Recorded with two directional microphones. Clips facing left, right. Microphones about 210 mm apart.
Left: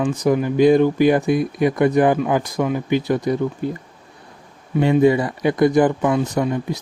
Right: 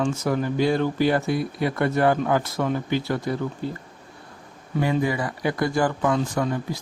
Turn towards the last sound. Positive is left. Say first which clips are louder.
# left 4 dB
turn(degrees=20)  # may be behind; listen again after turning